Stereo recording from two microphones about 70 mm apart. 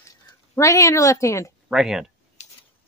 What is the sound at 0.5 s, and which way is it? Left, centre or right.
Speech, left.